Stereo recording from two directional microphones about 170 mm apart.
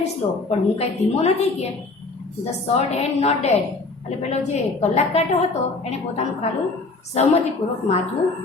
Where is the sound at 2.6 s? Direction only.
40° left (ahead or behind).